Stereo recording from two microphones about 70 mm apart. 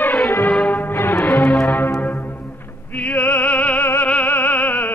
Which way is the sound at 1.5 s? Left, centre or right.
Centre.